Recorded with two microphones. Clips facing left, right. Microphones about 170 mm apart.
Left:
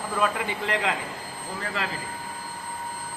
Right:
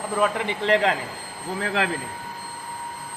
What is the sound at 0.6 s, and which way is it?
Speech, 35° right (ahead or behind).